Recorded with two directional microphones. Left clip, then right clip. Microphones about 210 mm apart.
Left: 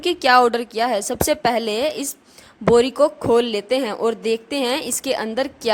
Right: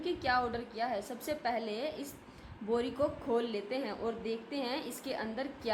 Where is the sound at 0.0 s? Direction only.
50° left (ahead or behind).